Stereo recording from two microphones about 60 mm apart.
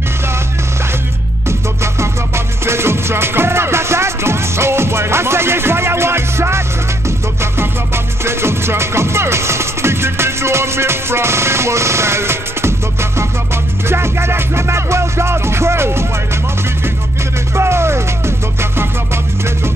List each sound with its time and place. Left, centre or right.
1.8 s music: right
13.8 s music: right
17.6 s music: right